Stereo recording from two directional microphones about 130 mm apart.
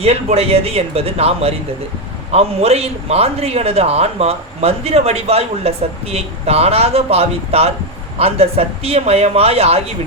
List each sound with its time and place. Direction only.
0.0 s a man's voice: 50° right (ahead or behind)